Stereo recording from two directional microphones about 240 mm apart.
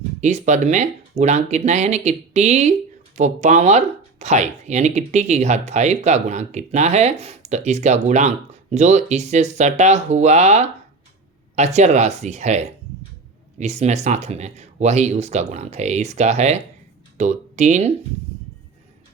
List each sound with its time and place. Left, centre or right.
0.2 s speech: right